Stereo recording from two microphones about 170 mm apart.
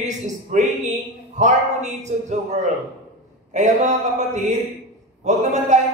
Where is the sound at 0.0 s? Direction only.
45° right (ahead or behind).